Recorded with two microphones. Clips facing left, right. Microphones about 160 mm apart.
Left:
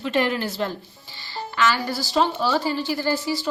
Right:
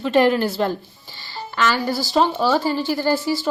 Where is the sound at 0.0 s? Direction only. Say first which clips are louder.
Right 6 dB; 45° right (ahead or behind).